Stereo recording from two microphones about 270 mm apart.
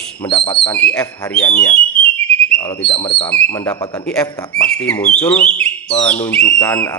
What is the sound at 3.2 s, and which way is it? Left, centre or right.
A man's voice, centre.